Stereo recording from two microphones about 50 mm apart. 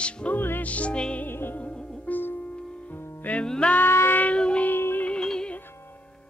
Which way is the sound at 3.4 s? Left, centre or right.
Centre.